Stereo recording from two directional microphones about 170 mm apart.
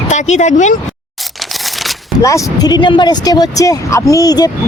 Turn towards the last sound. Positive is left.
turn(degrees=20)  # may be behind; listen again after turning